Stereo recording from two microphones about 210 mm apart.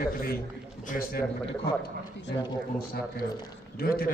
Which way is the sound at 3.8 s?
45° left (ahead or behind).